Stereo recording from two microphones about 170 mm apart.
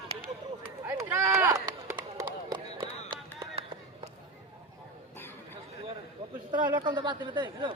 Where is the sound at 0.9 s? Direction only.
15° right (ahead or behind).